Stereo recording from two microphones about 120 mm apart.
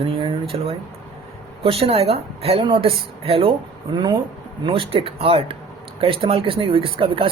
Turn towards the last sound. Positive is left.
turn(degrees=-50)  # may be behind; listen again after turning